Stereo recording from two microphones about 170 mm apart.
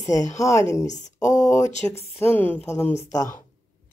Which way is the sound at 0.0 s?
20° left (ahead or behind).